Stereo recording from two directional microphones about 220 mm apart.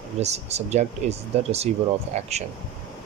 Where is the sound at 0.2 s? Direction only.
30° right (ahead or behind).